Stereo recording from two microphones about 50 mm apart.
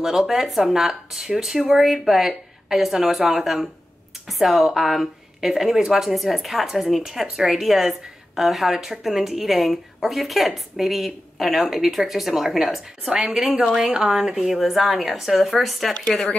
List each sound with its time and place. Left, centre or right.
0.0 s a woman's voice: centre
13.1 s a woman's voice: centre
15.9 s speech: centre